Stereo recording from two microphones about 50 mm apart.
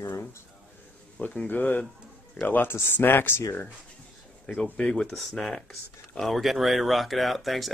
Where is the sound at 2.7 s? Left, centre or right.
Left.